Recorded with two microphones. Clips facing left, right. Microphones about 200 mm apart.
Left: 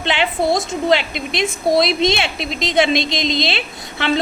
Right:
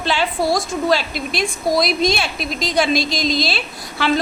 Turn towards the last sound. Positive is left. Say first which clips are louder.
# even
turn(degrees=25)  # may be behind; listen again after turning